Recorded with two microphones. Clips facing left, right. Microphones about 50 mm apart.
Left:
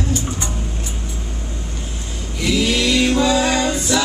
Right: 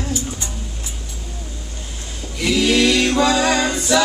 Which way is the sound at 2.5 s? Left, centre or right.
Centre.